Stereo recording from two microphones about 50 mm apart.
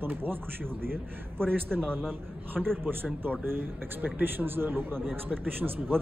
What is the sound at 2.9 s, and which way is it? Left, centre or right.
A man's voice, right.